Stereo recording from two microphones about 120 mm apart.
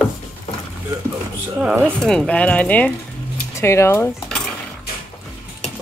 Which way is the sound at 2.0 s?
5° left (ahead or behind).